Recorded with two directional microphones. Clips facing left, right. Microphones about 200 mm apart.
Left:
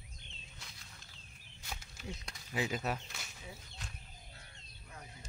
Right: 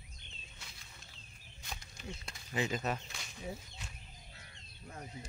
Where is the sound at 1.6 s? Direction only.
5° left (ahead or behind).